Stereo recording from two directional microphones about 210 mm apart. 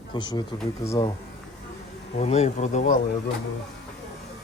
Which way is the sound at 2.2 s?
30° left (ahead or behind).